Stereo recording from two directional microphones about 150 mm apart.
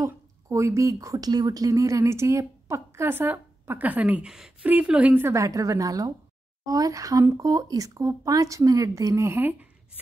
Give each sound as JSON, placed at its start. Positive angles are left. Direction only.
{"t": 0.0, "sound": "a woman's voice", "side_deg": -20}